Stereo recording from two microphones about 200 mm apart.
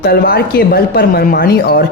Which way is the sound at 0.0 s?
50° left (ahead or behind).